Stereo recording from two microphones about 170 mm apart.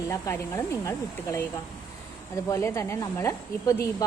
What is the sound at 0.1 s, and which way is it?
Speech, 20° left (ahead or behind).